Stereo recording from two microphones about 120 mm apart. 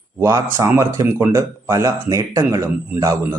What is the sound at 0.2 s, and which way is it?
Speech, 25° right (ahead or behind).